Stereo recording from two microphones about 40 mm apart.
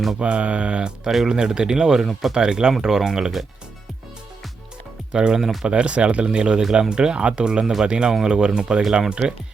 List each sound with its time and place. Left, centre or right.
0.2 s speech: right
2.0 s speech: centre
2.3 s speech: centre
5.1 s speech: centre
7.6 s speech: centre
7.9 s speech: right